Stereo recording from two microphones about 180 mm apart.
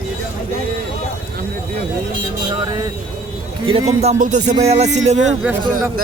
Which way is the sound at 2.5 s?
25° right (ahead or behind).